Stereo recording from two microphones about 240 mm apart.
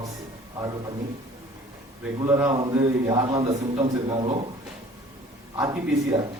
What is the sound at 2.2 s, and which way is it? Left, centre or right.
A man's voice, centre.